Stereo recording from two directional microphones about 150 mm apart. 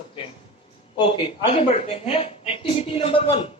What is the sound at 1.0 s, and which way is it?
A woman's voice, 35° left (ahead or behind).